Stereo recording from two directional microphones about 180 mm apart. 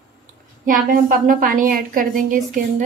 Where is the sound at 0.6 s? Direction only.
50° right (ahead or behind).